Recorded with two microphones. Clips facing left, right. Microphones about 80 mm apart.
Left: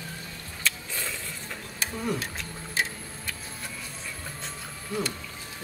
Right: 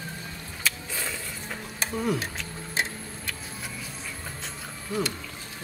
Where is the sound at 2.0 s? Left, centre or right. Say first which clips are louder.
Right 3 dB; centre.